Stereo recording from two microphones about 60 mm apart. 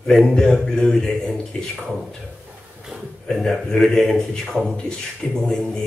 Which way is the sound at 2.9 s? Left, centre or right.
Centre.